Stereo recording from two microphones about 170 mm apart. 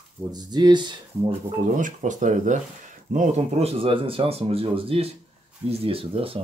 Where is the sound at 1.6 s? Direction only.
45° right (ahead or behind).